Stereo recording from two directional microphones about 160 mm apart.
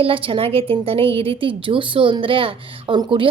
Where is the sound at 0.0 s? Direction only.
35° right (ahead or behind).